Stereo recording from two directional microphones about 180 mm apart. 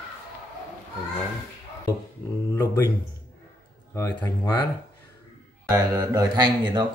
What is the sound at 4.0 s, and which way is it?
Speech, 15° left (ahead or behind).